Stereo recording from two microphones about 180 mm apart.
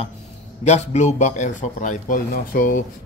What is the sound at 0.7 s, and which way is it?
A man's voice, 40° left (ahead or behind).